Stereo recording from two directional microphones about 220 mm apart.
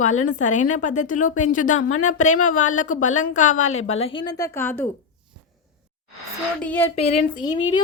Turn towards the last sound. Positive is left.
turn(degrees=25)  # may be behind; listen again after turning